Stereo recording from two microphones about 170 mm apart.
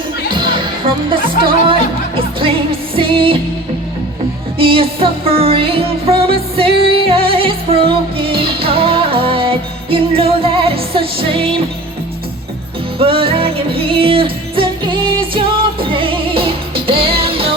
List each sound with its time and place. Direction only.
0.3 s music: 30° right (ahead or behind)
2.9 s music: 30° right (ahead or behind)
4.5 s music: 30° right (ahead or behind)
13.0 s music: 35° right (ahead or behind)